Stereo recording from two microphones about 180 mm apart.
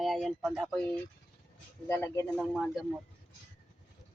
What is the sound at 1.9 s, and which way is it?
Speech, 15° left (ahead or behind).